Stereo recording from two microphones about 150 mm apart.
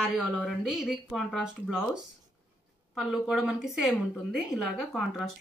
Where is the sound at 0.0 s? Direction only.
5° right (ahead or behind).